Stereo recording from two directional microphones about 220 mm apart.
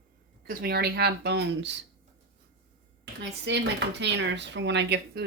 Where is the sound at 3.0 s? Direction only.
50° right (ahead or behind).